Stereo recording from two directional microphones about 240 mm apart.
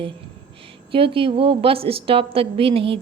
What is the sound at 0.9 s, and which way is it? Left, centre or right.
A woman's voice, right.